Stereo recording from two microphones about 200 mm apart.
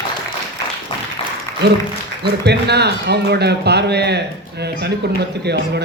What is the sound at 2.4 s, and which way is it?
A man's voice, 55° right (ahead or behind).